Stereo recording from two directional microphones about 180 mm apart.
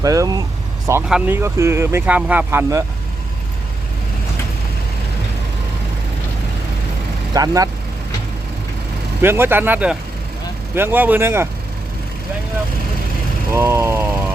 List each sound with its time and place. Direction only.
0.0 s speech: 20° right (ahead or behind)
1.0 s speech: 5° right (ahead or behind)
1.4 s speech: 15° right (ahead or behind)
7.3 s speech: 20° right (ahead or behind)
9.2 s speech: 10° right (ahead or behind)
13.5 s speech: 15° right (ahead or behind)